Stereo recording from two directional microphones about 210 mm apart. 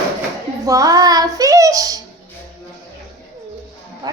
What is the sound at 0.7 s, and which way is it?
A woman's voice, 15° right (ahead or behind).